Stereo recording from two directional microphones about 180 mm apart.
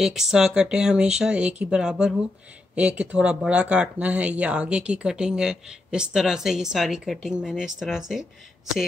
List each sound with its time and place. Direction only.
0.0 s speech: centre (ahead or behind)